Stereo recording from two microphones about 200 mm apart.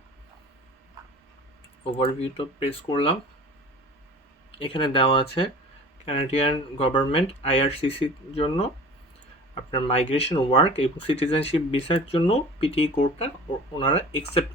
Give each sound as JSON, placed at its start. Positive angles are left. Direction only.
{"t": 1.8, "sound": "speech", "side_deg": 30}
{"t": 4.6, "sound": "speech", "side_deg": 25}
{"t": 9.7, "sound": "speech", "side_deg": 30}